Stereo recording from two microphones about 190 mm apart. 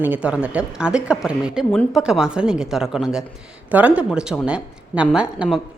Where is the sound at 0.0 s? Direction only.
5° right (ahead or behind).